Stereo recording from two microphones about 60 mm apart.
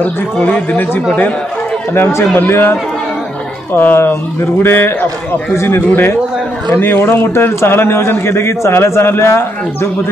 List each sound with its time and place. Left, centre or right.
0.0 s speech: left
2.0 s a man's voice: left